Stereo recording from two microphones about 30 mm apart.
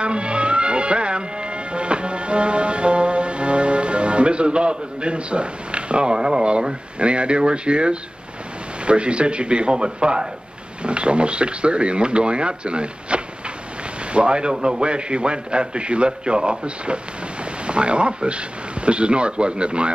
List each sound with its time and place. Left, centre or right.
0.0 s music: right
8.8 s speech: right